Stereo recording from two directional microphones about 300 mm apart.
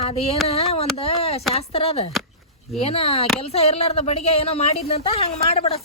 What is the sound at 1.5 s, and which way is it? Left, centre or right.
Speech, centre.